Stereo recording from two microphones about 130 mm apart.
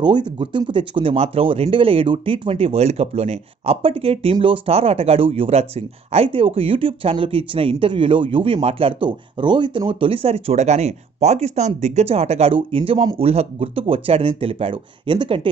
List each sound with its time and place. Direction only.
0.0 s speech: 35° right (ahead or behind)